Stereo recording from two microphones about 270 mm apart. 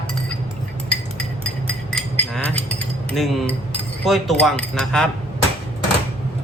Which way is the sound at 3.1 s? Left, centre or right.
Centre.